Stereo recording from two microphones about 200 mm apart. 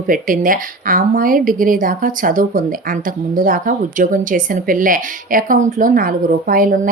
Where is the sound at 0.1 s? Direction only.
45° right (ahead or behind).